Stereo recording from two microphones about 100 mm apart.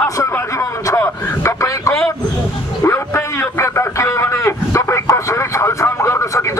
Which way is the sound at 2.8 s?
30° left (ahead or behind).